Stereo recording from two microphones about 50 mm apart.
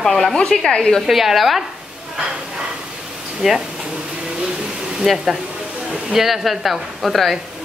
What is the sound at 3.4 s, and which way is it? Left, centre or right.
Speech, centre.